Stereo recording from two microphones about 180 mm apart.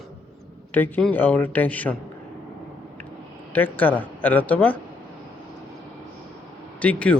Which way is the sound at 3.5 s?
10° left (ahead or behind).